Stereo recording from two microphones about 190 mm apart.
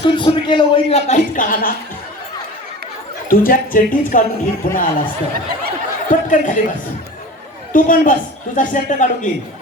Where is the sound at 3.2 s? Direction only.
50° left (ahead or behind).